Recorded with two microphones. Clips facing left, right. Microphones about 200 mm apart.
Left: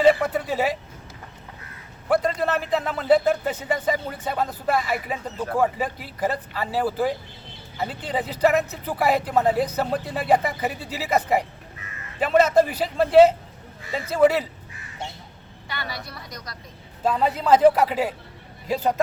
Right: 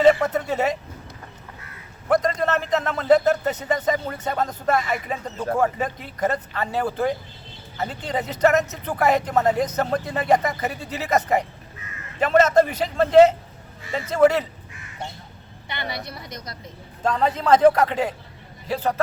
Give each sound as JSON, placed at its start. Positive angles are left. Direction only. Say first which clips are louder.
{"t": 0.0, "sound": "vehicle", "louder": "right 1 dB", "side_deg": 5}
{"t": 2.0, "sound": "speech", "louder": "right 1 dB", "side_deg": 5}
{"t": 15.7, "sound": "a woman's voice", "louder": "right 3 dB", "side_deg": -20}
{"t": 17.0, "sound": "speech", "louder": "even", "side_deg": 5}